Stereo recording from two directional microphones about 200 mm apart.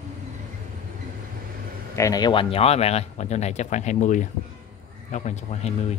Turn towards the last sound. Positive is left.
turn(degrees=35)  # may be behind; listen again after turning